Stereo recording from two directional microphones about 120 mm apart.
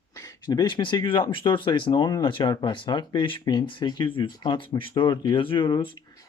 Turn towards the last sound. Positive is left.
turn(degrees=40)  # may be behind; listen again after turning